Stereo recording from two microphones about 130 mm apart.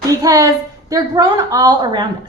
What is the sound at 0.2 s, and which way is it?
A woman's voice, 30° right (ahead or behind).